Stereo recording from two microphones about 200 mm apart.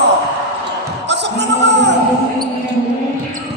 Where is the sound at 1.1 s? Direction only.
60° right (ahead or behind).